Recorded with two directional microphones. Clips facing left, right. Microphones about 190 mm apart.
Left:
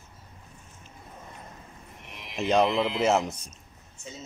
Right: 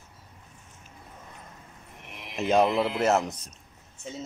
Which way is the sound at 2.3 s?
5° right (ahead or behind).